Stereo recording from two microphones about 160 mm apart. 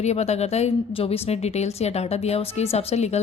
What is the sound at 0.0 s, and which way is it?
A woman's voice, 45° left (ahead or behind).